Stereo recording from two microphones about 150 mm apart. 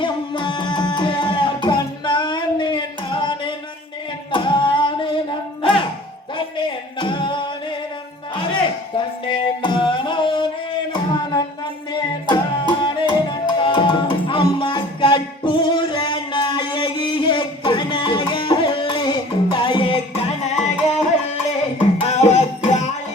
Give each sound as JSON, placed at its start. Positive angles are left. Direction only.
{"t": 0.0, "sound": "music", "side_deg": 30}
{"t": 6.3, "sound": "a sound", "side_deg": 30}
{"t": 9.0, "sound": "music", "side_deg": 30}
{"t": 12.8, "sound": "music", "side_deg": 30}
{"t": 20.4, "sound": "music", "side_deg": 50}